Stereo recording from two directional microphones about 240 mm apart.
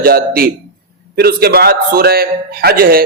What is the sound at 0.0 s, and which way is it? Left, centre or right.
A man's voice, right.